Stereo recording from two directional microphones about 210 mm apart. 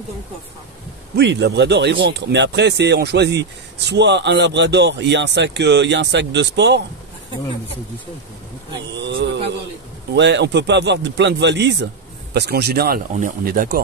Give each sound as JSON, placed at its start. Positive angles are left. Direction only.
{"t": 1.1, "sound": "speech", "side_deg": -55}
{"t": 8.9, "sound": "a sound", "side_deg": -55}
{"t": 10.1, "sound": "speech", "side_deg": -55}